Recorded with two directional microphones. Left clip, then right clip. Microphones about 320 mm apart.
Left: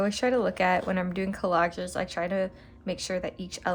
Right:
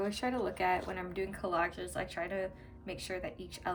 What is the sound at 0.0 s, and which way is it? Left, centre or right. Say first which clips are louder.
Speech: left 9 dB; left.